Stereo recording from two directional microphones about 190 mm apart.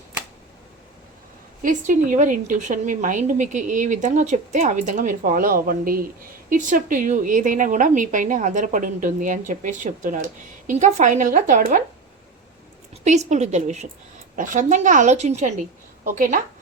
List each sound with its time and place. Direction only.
1.6 s a woman's voice: 45° right (ahead or behind)
12.9 s a woman's voice: 35° right (ahead or behind)